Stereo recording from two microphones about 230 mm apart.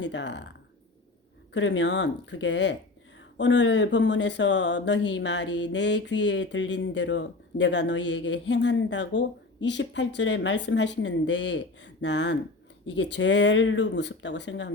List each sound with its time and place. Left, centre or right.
0.0 s speech: left
1.5 s speech: left